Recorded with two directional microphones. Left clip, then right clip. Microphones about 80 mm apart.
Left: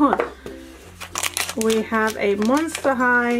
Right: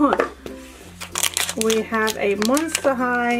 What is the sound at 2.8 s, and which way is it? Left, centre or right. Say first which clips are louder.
Speech: left 2 dB; left.